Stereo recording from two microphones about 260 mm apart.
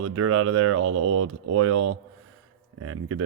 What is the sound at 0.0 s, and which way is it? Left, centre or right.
Speech, right.